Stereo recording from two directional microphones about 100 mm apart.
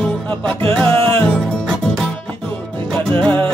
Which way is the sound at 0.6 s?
20° left (ahead or behind).